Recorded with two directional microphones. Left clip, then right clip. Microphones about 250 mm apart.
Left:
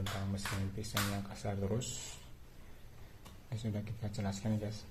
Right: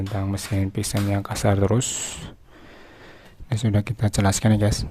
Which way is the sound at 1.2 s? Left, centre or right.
Right.